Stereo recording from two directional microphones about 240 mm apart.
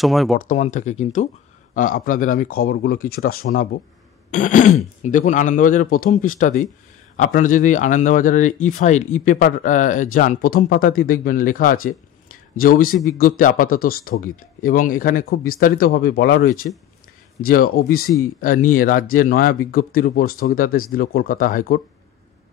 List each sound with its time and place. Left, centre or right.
0.0 s speech: centre
0.4 s speech: left